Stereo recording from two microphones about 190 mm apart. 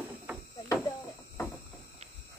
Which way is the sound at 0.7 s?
15° left (ahead or behind).